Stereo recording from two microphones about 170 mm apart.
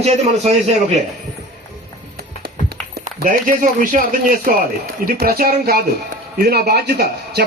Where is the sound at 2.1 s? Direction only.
65° right (ahead or behind).